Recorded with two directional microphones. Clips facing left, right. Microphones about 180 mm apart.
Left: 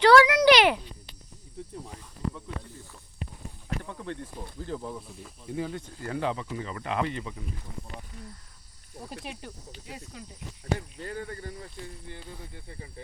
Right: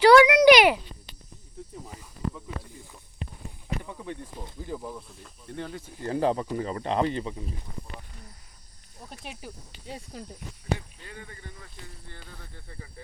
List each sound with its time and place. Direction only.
0.0 s a sound: 15° right (ahead or behind)
1.7 s snake: 5° right (ahead or behind)
3.8 s speech: 10° right (ahead or behind); by 5.8 s 5° left (ahead or behind)
6.0 s speech: 30° right (ahead or behind)
9.2 s speech: centre (ahead or behind)
9.8 s snake: 30° right (ahead or behind)
10.8 s a sound: 40° left (ahead or behind)
12.0 s snake: 15° left (ahead or behind)